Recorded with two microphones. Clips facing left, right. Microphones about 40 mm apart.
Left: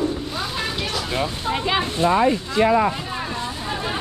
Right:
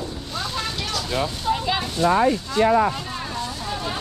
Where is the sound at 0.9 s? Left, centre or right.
Left.